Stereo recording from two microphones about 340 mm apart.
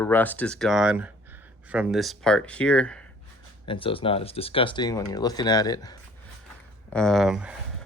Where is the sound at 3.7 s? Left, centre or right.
Centre.